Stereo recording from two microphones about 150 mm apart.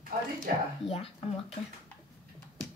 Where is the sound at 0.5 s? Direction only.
80° right.